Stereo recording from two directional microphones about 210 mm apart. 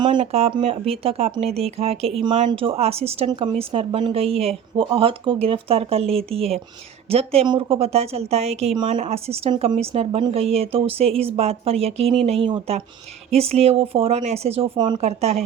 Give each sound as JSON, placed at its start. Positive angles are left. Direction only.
{"t": 0.0, "sound": "speech", "side_deg": -25}